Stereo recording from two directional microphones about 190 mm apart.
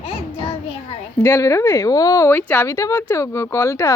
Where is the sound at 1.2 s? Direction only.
15° left (ahead or behind).